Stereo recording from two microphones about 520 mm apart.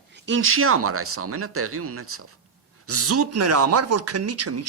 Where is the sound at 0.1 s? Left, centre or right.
Right.